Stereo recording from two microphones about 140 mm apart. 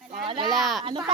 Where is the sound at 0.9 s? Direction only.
35° right (ahead or behind).